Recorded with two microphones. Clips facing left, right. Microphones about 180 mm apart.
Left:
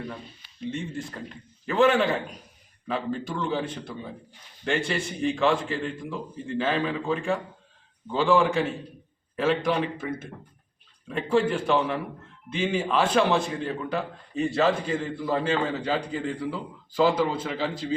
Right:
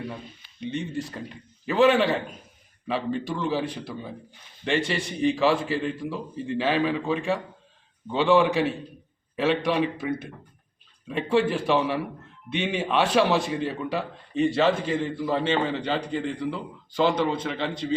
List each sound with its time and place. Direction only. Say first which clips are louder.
0.6 s a man's voice: right 2 dB; centre (ahead or behind)